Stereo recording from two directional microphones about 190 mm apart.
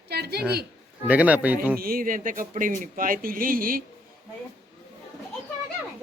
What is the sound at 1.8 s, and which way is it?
Speech, 50° right (ahead or behind).